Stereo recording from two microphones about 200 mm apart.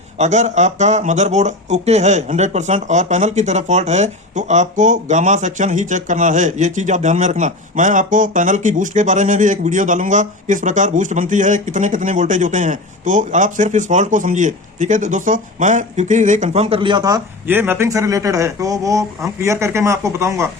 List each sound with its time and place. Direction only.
0.2 s speech: 35° right (ahead or behind); by 20.5 s 15° right (ahead or behind)